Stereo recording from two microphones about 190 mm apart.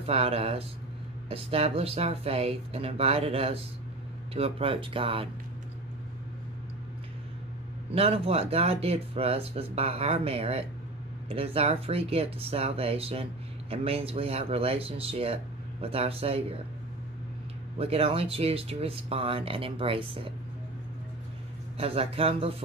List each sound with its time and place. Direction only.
0.0 s speech: 30° right (ahead or behind)
7.9 s speech: 30° right (ahead or behind)
17.7 s speech: 30° right (ahead or behind)
21.7 s speech: 30° right (ahead or behind)